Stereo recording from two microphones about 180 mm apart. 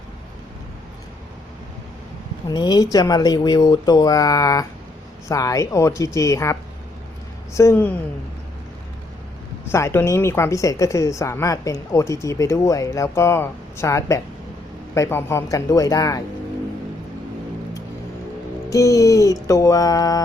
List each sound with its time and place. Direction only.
2.5 s speech: 20° left (ahead or behind)
9.7 s speech: 15° left (ahead or behind)
18.7 s speech: 20° left (ahead or behind)